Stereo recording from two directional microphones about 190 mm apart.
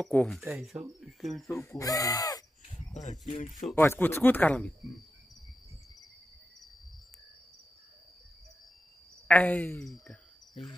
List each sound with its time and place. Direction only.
0.0 s cricket: 5° left (ahead or behind)
1.5 s speech: 15° left (ahead or behind)
2.9 s speech: 40° left (ahead or behind)
3.6 s speech: 10° left (ahead or behind)
9.3 s speech: 10° left (ahead or behind)